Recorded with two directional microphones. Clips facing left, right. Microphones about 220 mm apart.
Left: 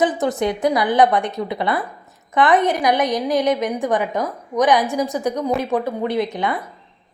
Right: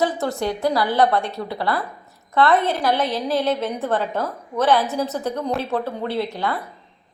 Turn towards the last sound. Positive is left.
turn(degrees=20)  # may be behind; listen again after turning